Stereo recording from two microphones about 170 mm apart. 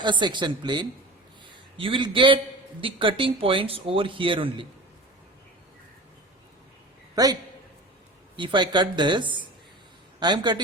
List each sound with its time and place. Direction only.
0.0 s a man's voice: 25° right (ahead or behind)
8.4 s speech: 25° right (ahead or behind)